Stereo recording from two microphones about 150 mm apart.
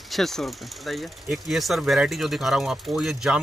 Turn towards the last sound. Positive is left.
turn(degrees=0)  # may be behind; listen again after turning